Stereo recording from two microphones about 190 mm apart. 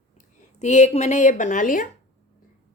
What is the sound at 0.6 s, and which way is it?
A woman's voice, 35° left (ahead or behind).